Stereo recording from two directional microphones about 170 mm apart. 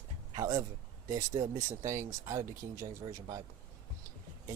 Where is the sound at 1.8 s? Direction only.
15° right (ahead or behind).